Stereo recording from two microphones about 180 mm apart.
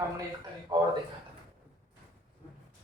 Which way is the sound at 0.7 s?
25° right (ahead or behind).